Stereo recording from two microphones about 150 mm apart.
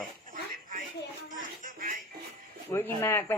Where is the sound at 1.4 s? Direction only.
60° right (ahead or behind).